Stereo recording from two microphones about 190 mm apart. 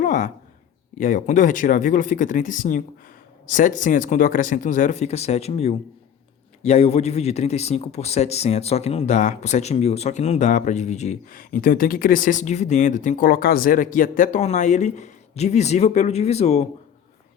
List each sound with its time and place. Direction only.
0.0 s a man's voice: 40° left (ahead or behind)